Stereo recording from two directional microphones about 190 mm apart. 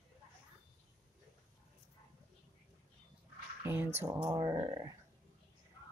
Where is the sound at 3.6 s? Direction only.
10° right (ahead or behind).